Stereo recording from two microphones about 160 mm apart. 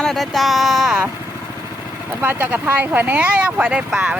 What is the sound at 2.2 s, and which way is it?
Speech, 10° right (ahead or behind).